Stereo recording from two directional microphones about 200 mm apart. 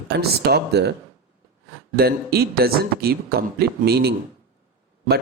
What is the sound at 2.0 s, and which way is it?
A man's voice, 50° right (ahead or behind).